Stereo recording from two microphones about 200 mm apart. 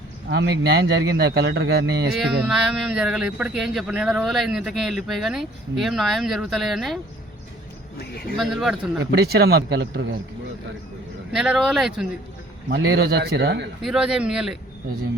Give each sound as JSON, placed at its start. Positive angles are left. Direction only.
{"t": 0.3, "sound": "speech", "side_deg": -55}
{"t": 2.1, "sound": "speech", "side_deg": 0}
{"t": 8.4, "sound": "speech", "side_deg": 0}
{"t": 9.1, "sound": "speech", "side_deg": -50}
{"t": 11.3, "sound": "speech", "side_deg": 0}
{"t": 12.6, "sound": "speech", "side_deg": -55}
{"t": 13.8, "sound": "speech", "side_deg": 0}